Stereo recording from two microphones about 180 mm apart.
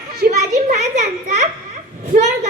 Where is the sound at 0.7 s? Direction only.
40° right (ahead or behind).